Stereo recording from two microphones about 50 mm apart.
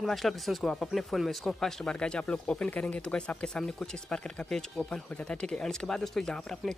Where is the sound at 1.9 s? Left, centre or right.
Centre.